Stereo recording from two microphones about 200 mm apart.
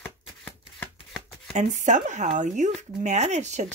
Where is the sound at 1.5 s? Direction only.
35° right (ahead or behind).